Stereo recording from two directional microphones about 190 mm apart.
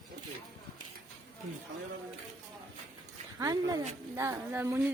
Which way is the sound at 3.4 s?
15° right (ahead or behind).